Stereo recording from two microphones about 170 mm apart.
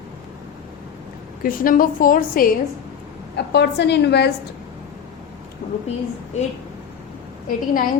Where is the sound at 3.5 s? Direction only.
90° left.